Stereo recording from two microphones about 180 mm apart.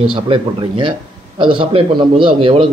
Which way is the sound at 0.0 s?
30° right (ahead or behind).